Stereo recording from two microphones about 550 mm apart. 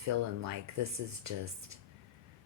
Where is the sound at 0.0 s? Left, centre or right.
Right.